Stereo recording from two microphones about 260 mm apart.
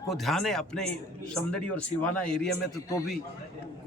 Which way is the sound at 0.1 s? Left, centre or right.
Centre.